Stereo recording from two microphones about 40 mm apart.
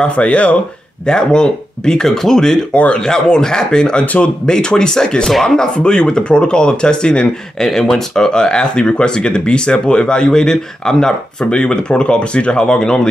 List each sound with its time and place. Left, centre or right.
0.0 s speech: left
1.0 s speech: left
2.7 s speech: left
3.1 s speech: centre
5.9 s speech: left